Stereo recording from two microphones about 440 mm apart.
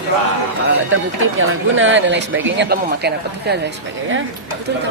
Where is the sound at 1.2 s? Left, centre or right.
Right.